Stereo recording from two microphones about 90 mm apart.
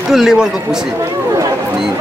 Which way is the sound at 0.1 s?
5° right (ahead or behind).